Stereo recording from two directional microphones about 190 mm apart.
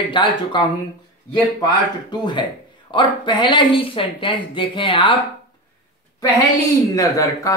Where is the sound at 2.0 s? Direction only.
25° left (ahead or behind).